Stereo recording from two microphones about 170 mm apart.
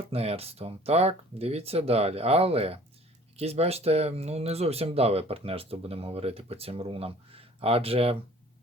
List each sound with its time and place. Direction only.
0.1 s speech: 35° right (ahead or behind)